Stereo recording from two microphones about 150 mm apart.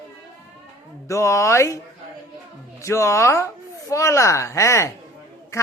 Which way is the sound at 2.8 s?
20° left (ahead or behind).